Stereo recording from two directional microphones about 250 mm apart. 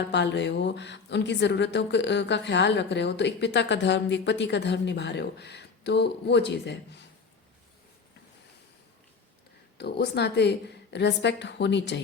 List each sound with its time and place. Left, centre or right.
0.0 s a woman's voice: left
9.7 s a woman's voice: left